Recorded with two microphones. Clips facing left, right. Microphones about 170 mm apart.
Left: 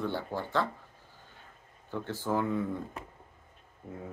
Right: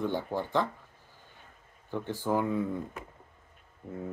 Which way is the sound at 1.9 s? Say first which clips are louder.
Right 2 dB; 15° right (ahead or behind).